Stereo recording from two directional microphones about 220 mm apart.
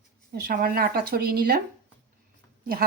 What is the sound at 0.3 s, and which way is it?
Speech, 45° right (ahead or behind).